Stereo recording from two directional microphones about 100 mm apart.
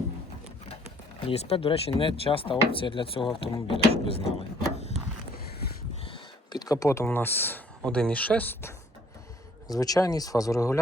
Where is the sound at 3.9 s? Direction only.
90° left.